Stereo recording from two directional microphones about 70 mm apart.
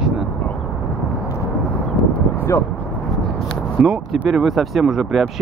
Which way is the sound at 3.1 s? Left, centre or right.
Centre.